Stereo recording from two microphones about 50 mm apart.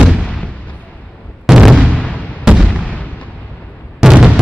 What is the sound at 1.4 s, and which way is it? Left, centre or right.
Artillery fire, centre.